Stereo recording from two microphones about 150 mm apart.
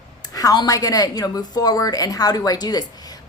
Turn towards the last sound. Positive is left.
turn(degrees=25)  # may be behind; listen again after turning